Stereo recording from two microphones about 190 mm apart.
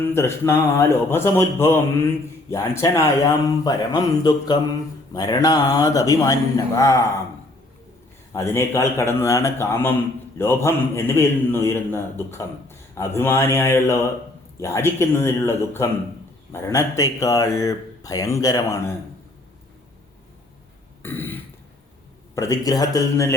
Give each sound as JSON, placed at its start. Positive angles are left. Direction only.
{"t": 0.0, "sound": "speech", "side_deg": 10}
{"t": 8.3, "sound": "speech", "side_deg": 15}
{"t": 21.0, "sound": "burping", "side_deg": 10}
{"t": 22.4, "sound": "speech", "side_deg": 20}